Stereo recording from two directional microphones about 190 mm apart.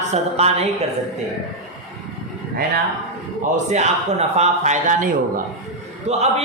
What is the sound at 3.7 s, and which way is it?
Speech, 35° right (ahead or behind).